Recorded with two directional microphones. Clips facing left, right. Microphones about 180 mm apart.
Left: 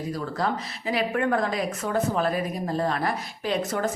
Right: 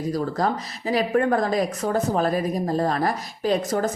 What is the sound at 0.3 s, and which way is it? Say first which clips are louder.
Speech: right 3 dB; 40° right (ahead or behind).